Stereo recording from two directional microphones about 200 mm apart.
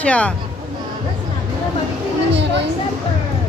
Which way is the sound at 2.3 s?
60° right (ahead or behind).